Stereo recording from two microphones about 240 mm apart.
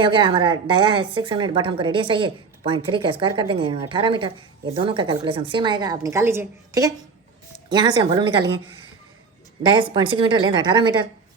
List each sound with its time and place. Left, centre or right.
0.0 s a woman's voice: right
9.6 s a woman's voice: centre